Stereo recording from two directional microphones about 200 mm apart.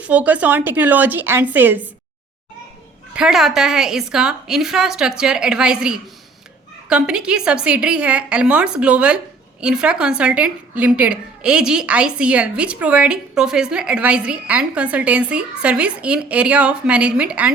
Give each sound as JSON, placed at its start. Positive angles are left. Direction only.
{"t": 0.0, "sound": "a woman's voice", "side_deg": -5}
{"t": 3.2, "sound": "a woman's voice", "side_deg": 0}